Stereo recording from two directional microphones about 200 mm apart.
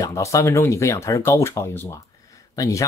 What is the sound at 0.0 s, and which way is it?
Speech, 15° left (ahead or behind).